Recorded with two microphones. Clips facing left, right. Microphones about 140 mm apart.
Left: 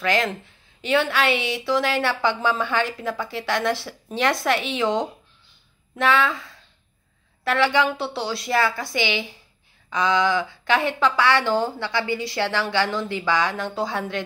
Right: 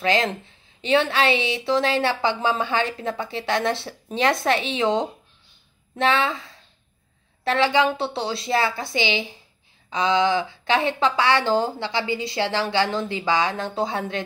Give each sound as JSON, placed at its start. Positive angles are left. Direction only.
{"t": 0.0, "sound": "a woman's voice", "side_deg": -25}